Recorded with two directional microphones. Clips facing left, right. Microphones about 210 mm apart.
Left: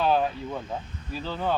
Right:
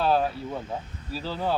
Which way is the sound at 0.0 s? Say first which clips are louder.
Even; 5° right (ahead or behind).